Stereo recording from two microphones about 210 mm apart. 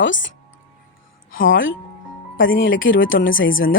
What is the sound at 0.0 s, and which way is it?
Speech, 60° left (ahead or behind).